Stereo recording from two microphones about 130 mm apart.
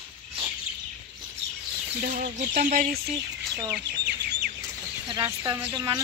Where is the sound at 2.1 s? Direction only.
90° right.